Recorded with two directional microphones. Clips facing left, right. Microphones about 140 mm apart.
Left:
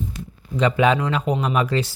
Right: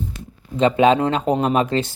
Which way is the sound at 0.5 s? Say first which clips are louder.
Right 3 dB; 25° right (ahead or behind).